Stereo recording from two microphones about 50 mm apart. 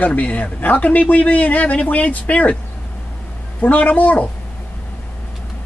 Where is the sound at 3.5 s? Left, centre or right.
Left.